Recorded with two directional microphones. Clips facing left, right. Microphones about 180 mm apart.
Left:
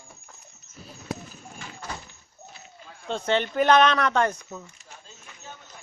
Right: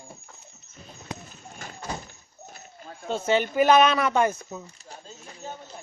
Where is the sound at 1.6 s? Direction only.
40° right (ahead or behind).